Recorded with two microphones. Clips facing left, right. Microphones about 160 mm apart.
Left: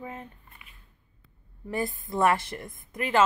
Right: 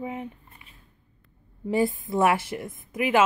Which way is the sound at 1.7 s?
10° right (ahead or behind).